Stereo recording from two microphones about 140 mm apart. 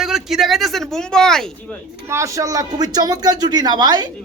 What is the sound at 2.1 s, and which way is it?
A man's voice, 20° right (ahead or behind).